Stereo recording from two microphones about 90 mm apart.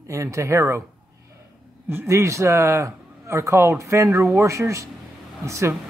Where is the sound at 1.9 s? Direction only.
25° right (ahead or behind).